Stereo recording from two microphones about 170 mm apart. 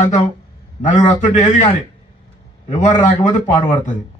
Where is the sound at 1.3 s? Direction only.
45° left (ahead or behind).